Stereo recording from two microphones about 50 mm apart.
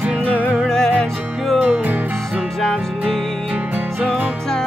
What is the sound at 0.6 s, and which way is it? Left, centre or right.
Music, centre.